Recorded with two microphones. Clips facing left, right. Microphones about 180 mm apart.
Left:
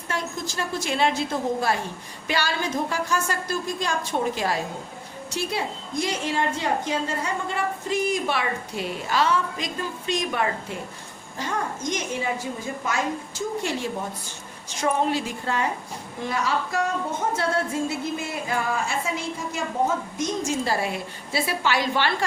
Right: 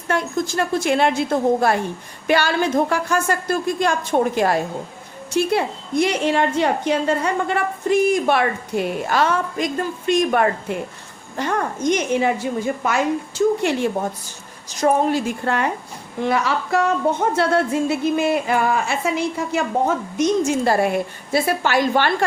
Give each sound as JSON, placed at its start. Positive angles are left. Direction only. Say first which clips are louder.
{"t": 0.1, "sound": "a woman's voice", "louder": "right 9 dB", "side_deg": -60}
{"t": 14.7, "sound": "a woman's voice", "louder": "right 6 dB", "side_deg": -40}
{"t": 15.4, "sound": "a woman's voice", "louder": "right 4 dB", "side_deg": -65}
{"t": 16.2, "sound": "music", "louder": "right 6 dB", "side_deg": -65}
{"t": 20.1, "sound": "a woman's voice", "louder": "right 8 dB", "side_deg": -65}